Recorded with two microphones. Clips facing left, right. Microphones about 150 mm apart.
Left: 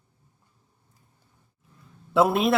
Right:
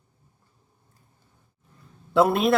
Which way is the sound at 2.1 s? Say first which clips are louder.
Right 1 dB; centre (ahead or behind).